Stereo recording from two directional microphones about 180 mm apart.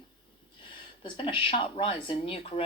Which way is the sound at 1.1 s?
30° left (ahead or behind).